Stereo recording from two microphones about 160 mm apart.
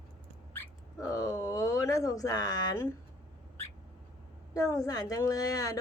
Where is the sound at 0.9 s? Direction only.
20° left (ahead or behind).